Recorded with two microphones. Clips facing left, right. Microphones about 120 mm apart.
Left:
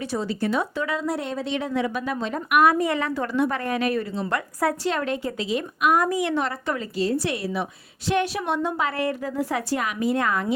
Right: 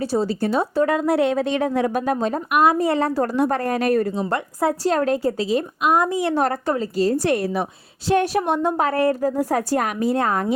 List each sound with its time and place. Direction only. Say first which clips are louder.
0.0 s a woman's voice: right 5 dB; 35° right (ahead or behind)
0.9 s a woman's voice: right 8 dB; 55° right (ahead or behind); by 1.5 s 70° right (ahead or behind)
1.5 s a woman's voice: right 5 dB; 50° right (ahead or behind)
2.5 s a woman's voice: right 1 dB; 25° right (ahead or behind)
5.9 s a woman's voice: right 3 dB; 25° right (ahead or behind); by 10.5 s 40° right (ahead or behind)